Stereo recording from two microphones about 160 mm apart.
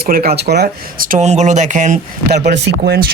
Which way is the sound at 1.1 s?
45° right (ahead or behind).